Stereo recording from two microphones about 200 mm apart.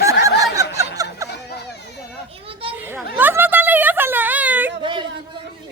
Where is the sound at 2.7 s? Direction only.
10° right (ahead or behind).